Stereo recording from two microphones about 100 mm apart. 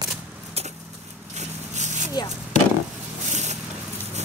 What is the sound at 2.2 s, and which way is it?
Speech, 45° left (ahead or behind).